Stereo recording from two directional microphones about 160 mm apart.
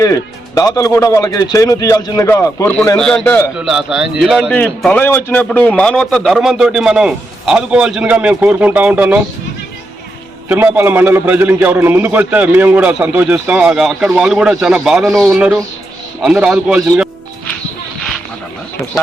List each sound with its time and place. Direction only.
0.0 s a man's voice: 20° left (ahead or behind)
3.6 s a man's voice: 5° right (ahead or behind)
10.5 s a man's voice: 10° right (ahead or behind)